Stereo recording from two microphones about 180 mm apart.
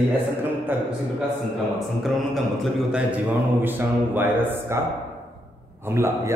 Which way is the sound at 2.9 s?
10° right (ahead or behind).